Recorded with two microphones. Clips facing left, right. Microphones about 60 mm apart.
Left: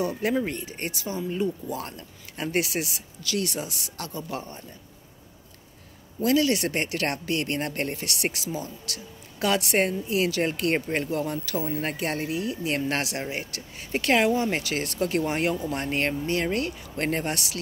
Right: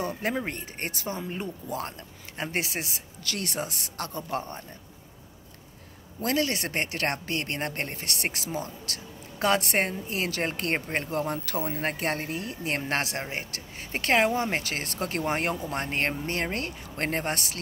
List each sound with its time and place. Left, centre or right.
0.2 s speech: right
0.6 s speech: right
2.3 s speech: right
3.2 s speech: right
6.2 s speech: right
8.0 s speech: right